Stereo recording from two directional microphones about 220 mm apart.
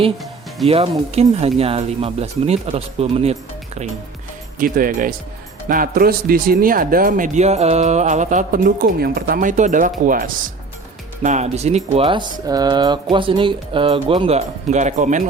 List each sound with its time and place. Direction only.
0.7 s speech: 25° right (ahead or behind)
4.6 s speech: 40° right (ahead or behind)